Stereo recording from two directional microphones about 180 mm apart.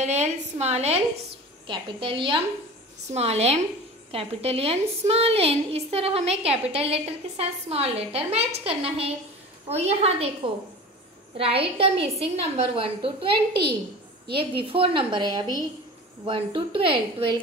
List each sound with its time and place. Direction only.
0.0 s a woman's voice: 40° right (ahead or behind)
11.3 s a woman's voice: 30° right (ahead or behind)
13.5 s a woman's voice: 65° right (ahead or behind)
14.3 s a woman's voice: 30° right (ahead or behind)